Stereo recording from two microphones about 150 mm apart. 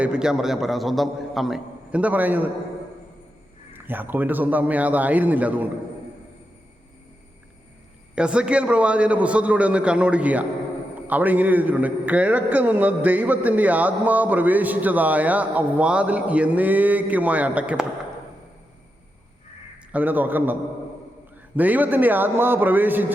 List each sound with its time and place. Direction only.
0.0 s a man's voice: 5° right (ahead or behind)
3.7 s a man's voice: 15° right (ahead or behind)
8.1 s a man's voice: 5° right (ahead or behind)
19.9 s a man's voice: 10° right (ahead or behind)